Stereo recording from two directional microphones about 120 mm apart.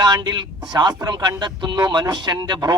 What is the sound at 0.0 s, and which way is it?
A man's voice, 35° right (ahead or behind).